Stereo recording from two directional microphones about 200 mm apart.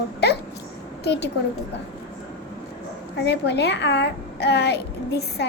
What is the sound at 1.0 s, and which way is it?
Speech, 55° left (ahead or behind).